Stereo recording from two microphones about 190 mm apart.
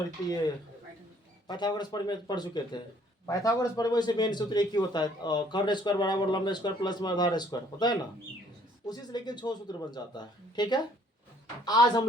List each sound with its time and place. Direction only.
1.5 s a man's voice: 20° left (ahead or behind)